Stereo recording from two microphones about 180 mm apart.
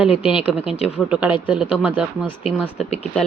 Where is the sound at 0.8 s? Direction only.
5° right (ahead or behind).